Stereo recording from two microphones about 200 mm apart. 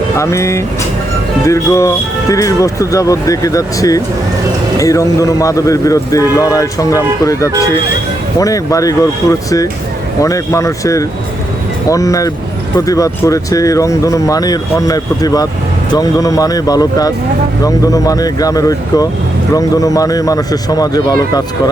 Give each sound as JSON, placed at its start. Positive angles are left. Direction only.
{"t": 0.2, "sound": "speech", "side_deg": 15}